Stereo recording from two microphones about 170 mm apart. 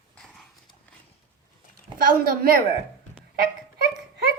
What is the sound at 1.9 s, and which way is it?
Speech, 60° right (ahead or behind).